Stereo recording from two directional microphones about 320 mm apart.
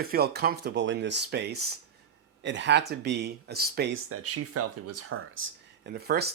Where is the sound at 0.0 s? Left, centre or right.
Right.